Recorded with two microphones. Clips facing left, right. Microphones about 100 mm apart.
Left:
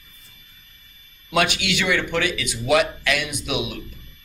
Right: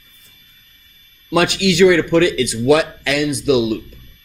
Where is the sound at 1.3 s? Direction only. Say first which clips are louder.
Right 6 dB; 35° right (ahead or behind).